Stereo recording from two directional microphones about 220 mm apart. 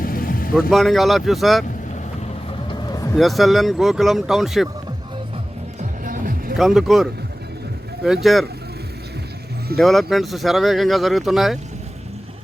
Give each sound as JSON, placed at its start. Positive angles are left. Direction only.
{"t": 0.0, "sound": "vehicle", "side_deg": 40}
{"t": 0.7, "sound": "speech", "side_deg": 0}
{"t": 2.6, "sound": "vehicle", "side_deg": 15}
{"t": 3.2, "sound": "speech", "side_deg": 0}
{"t": 5.8, "sound": "music", "side_deg": -40}
{"t": 6.6, "sound": "speech", "side_deg": 0}
{"t": 9.7, "sound": "speech", "side_deg": 0}